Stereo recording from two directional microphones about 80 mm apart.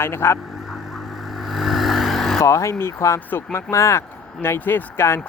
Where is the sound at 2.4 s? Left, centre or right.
Left.